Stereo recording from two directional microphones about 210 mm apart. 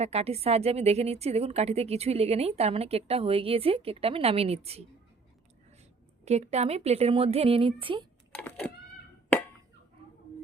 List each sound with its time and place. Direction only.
0.0 s a woman's voice: 30° right (ahead or behind)
6.2 s a woman's voice: 30° right (ahead or behind)
8.3 s a sound: 5° left (ahead or behind)